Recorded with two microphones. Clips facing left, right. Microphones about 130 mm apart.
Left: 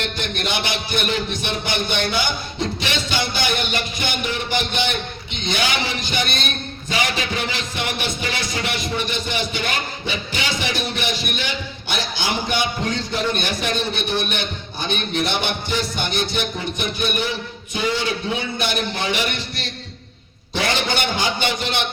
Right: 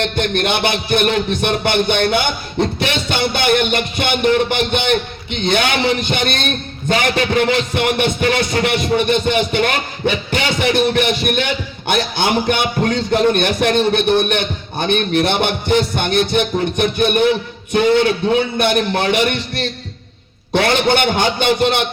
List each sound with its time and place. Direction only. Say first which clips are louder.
0.2 s a man's voice: right 10 dB; 60° right (ahead or behind)
20.5 s a man's voice: right 8 dB; 55° right (ahead or behind)